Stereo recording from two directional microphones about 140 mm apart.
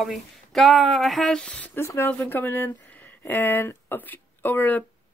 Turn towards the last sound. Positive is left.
turn(degrees=15)  # may be behind; listen again after turning